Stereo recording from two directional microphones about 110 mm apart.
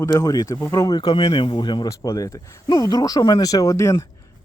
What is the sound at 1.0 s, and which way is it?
Speech, 40° left (ahead or behind).